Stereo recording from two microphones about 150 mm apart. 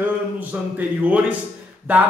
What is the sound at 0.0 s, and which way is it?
A man's voice, 10° right (ahead or behind).